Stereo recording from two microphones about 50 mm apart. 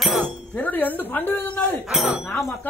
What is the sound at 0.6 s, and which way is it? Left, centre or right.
A woman's voice, left.